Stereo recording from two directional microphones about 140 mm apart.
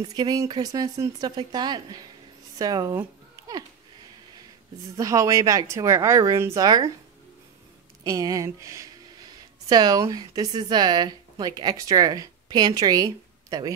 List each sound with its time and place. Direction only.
0.0 s speech: 30° right (ahead or behind)
4.9 s speech: 25° right (ahead or behind)
8.0 s speech: 25° right (ahead or behind)